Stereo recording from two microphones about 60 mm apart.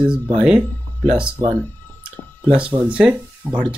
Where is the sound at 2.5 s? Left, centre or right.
Centre.